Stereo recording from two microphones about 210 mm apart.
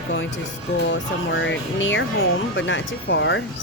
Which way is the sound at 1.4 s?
65° left (ahead or behind).